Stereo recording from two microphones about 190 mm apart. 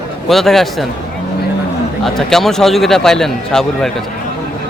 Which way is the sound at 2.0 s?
Centre (ahead or behind).